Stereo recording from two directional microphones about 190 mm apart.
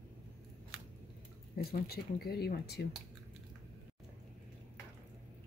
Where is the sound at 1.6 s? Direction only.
55° left (ahead or behind).